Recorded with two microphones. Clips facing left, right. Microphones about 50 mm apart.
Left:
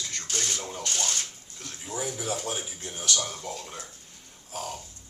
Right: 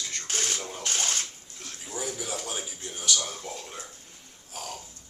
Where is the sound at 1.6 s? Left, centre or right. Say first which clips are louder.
Left 2 dB; centre.